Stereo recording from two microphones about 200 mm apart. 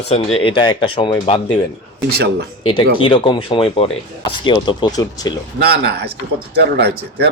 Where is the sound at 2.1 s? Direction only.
55° right (ahead or behind).